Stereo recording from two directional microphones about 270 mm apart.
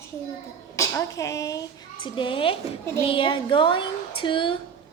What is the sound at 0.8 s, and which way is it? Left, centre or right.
A woman's voice, centre.